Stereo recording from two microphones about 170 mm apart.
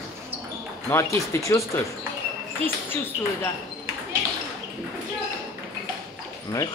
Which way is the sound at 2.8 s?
15° left (ahead or behind).